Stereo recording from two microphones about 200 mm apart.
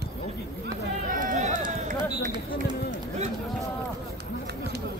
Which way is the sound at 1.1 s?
40° right (ahead or behind).